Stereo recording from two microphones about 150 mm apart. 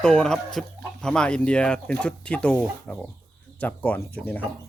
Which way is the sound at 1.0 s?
5° left (ahead or behind).